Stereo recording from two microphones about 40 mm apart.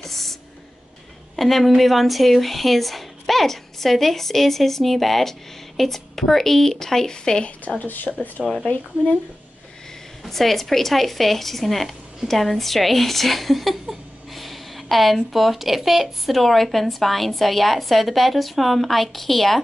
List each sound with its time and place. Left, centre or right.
0.0 s a sound: centre
1.3 s speech: centre
7.8 s speech: left
8.4 s speech: centre
10.3 s speech: centre